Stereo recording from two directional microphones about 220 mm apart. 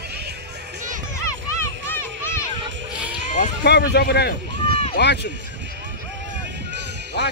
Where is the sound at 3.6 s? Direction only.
50° left (ahead or behind).